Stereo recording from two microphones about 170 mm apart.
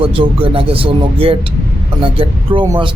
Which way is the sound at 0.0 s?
30° right (ahead or behind).